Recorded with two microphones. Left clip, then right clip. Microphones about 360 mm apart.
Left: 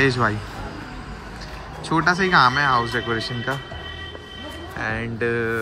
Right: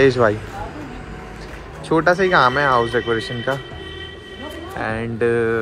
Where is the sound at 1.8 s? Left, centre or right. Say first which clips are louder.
Right 4 dB; centre.